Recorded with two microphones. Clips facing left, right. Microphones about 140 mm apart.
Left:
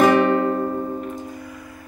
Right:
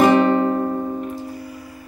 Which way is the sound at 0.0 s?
5° right (ahead or behind).